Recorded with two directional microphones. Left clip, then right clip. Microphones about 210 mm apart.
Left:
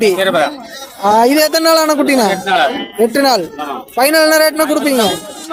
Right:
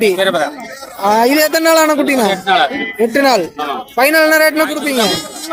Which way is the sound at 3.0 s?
15° left (ahead or behind).